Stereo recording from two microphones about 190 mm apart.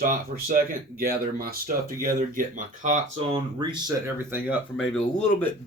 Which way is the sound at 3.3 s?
20° right (ahead or behind).